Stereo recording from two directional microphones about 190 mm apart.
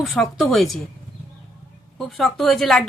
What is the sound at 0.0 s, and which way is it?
Speech, centre (ahead or behind).